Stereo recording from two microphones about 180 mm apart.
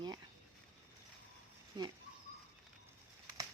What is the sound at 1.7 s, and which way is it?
Speech, 25° right (ahead or behind).